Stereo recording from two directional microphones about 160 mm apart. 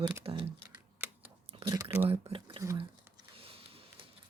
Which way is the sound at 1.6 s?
20° right (ahead or behind).